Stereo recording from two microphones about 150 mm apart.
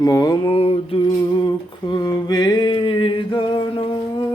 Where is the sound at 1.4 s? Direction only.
25° left (ahead or behind).